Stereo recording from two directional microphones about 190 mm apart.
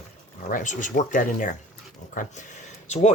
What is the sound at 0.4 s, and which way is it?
Speech, 40° left (ahead or behind).